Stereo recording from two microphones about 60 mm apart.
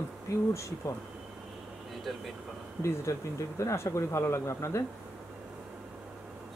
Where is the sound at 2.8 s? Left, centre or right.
Left.